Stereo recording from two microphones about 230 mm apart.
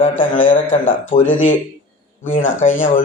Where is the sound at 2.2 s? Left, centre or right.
Left.